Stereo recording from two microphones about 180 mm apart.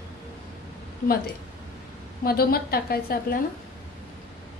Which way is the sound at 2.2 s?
55° left (ahead or behind).